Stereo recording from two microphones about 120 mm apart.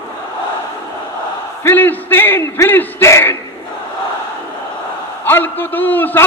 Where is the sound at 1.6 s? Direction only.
15° left (ahead or behind).